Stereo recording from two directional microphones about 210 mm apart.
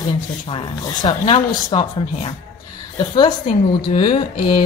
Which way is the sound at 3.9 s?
25° left (ahead or behind).